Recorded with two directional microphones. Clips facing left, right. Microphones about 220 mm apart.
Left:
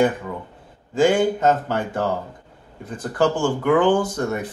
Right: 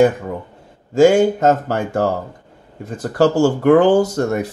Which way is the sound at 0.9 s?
45° right (ahead or behind).